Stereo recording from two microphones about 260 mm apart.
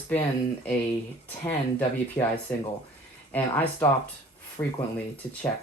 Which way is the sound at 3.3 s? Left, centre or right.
Centre.